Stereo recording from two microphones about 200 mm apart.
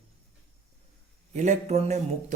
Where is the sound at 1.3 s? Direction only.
35° right (ahead or behind).